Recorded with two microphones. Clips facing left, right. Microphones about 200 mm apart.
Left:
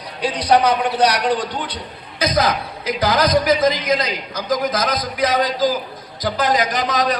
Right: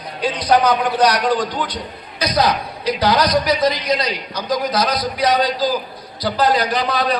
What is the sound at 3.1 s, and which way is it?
Speech, 50° left (ahead or behind).